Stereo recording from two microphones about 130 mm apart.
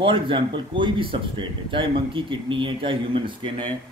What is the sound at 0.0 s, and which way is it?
Speech, 40° right (ahead or behind).